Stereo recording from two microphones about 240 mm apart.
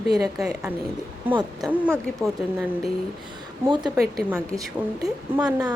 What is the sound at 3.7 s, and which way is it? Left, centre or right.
Speech, centre.